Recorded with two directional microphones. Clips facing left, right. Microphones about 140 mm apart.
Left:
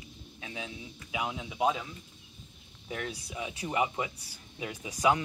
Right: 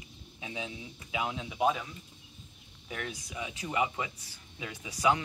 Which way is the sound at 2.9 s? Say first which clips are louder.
Left 2 dB; 10° left (ahead or behind).